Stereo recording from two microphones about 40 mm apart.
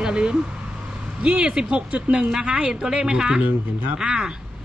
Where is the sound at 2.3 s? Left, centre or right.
Right.